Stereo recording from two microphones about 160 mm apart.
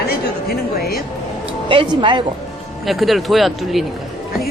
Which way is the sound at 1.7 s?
30° right (ahead or behind).